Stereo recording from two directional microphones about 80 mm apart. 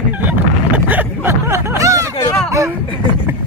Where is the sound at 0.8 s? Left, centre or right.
Right.